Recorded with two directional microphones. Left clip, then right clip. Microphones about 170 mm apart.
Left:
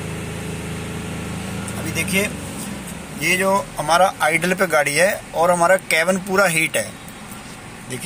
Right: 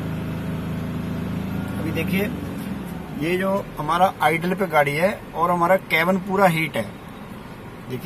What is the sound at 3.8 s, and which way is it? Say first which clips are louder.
Speech: left 2 dB; 5° left (ahead or behind).